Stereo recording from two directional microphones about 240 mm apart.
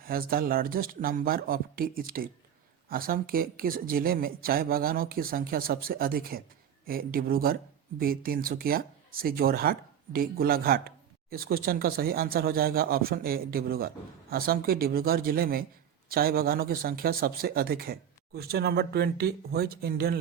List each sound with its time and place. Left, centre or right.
0.0 s speech: right